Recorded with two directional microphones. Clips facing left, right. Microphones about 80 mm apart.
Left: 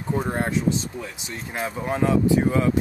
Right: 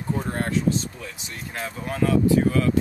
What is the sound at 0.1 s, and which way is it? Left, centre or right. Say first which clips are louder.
Speech: left 2 dB; centre.